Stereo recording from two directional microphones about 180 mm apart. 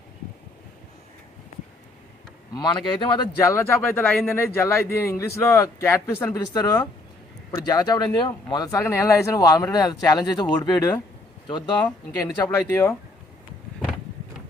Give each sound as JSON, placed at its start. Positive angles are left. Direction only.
{"t": 2.5, "sound": "a man's voice", "side_deg": 25}